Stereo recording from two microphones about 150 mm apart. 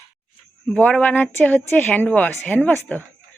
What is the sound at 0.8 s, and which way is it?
Speech, 5° left (ahead or behind).